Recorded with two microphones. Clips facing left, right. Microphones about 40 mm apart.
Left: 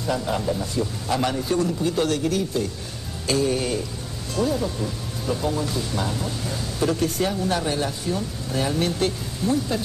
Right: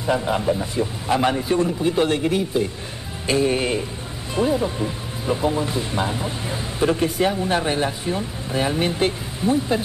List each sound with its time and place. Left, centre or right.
0.0 s speech: right